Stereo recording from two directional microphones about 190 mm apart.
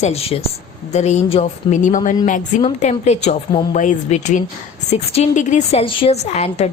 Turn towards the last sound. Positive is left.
turn(degrees=35)  # may be behind; listen again after turning